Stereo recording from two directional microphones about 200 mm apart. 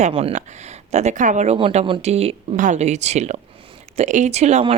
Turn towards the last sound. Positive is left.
turn(degrees=-35)  # may be behind; listen again after turning